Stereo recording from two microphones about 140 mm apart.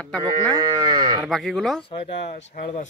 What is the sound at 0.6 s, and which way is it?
Cattle, 30° right (ahead or behind).